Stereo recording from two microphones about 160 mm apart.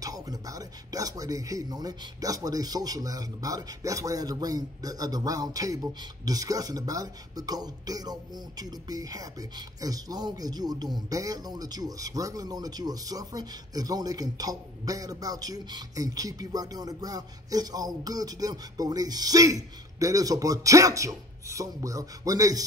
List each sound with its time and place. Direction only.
0.0 s speech: 25° right (ahead or behind)